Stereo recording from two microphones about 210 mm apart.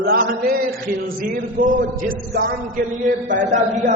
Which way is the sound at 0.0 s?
45° right (ahead or behind).